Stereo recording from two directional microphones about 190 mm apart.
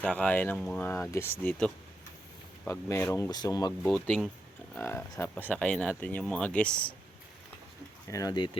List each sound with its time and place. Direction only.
0.0 s speech: 5° left (ahead or behind)
4.0 s speech: 5° left (ahead or behind)
8.1 s speech: 20° left (ahead or behind)